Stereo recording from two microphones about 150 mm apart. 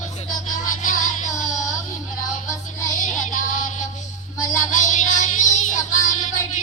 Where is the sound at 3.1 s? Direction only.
55° left (ahead or behind).